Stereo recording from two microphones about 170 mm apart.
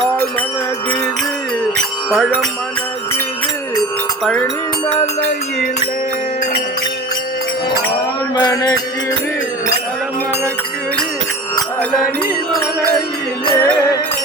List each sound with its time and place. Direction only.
2.0 s music: centre (ahead or behind)
3.8 s music: 5° left (ahead or behind)
8.4 s music: 25° left (ahead or behind)
13.4 s music: 20° left (ahead or behind)